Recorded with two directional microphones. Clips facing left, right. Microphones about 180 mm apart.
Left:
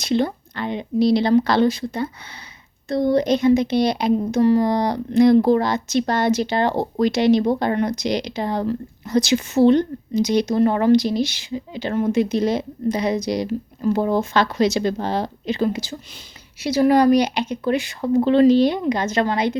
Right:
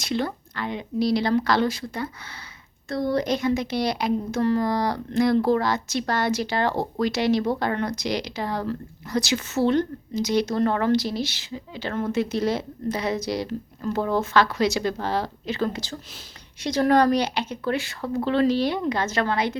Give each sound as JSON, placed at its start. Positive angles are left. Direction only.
{"t": 0.0, "sound": "speech", "side_deg": 20}